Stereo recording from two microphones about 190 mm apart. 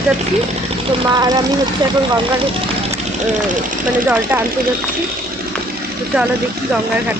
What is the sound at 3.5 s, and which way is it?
Speech, 45° right (ahead or behind).